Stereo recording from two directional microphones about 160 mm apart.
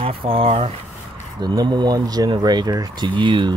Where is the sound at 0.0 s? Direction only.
35° right (ahead or behind).